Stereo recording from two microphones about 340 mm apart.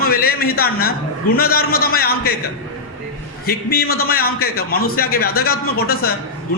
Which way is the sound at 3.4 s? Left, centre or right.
Left.